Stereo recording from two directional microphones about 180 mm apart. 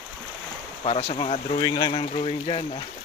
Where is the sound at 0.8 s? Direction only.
30° left (ahead or behind).